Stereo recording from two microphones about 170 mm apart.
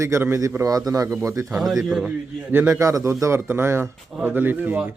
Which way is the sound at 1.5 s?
5° right (ahead or behind).